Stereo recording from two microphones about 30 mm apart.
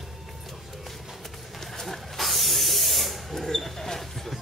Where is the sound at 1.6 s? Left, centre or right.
Centre.